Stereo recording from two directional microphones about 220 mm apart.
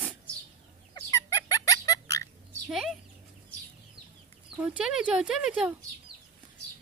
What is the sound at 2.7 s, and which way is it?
Chicken, centre (ahead or behind).